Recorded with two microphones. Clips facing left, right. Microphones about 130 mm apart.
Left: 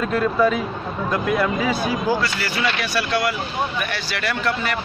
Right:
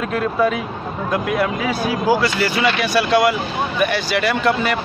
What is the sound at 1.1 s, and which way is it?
Speech, 10° right (ahead or behind).